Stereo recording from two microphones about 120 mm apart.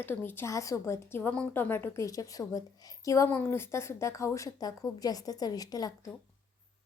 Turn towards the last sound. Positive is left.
turn(degrees=30)  # may be behind; listen again after turning